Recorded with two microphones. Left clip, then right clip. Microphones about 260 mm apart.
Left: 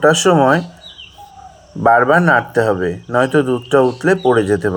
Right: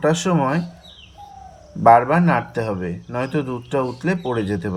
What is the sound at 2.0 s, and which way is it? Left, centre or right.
Speech, left.